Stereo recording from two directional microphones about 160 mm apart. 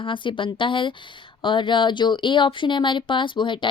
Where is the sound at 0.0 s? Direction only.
30° left (ahead or behind).